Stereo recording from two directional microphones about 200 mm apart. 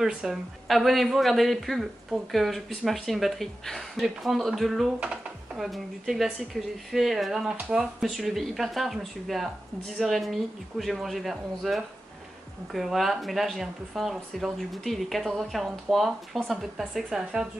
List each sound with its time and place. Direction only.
0.0 s speech: centre (ahead or behind)